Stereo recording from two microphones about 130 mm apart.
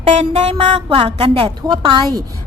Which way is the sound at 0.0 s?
55° right (ahead or behind).